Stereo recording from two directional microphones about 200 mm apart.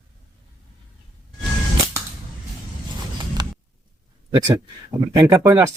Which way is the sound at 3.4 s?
20° right (ahead or behind).